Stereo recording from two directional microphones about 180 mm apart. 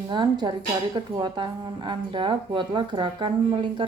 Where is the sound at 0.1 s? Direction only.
25° right (ahead or behind).